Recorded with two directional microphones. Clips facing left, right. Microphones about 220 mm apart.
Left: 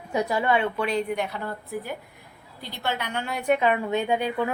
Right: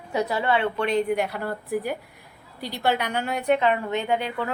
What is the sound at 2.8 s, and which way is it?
Speech, 15° right (ahead or behind).